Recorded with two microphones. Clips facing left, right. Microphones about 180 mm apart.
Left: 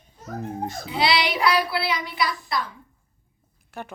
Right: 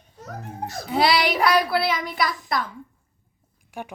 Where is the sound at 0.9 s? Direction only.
50° right (ahead or behind).